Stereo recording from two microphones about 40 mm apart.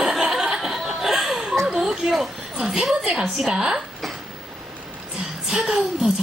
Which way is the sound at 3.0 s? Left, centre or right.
Centre.